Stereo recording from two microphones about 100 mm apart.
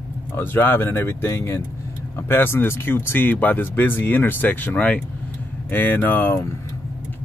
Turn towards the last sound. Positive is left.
turn(degrees=20)  # may be behind; listen again after turning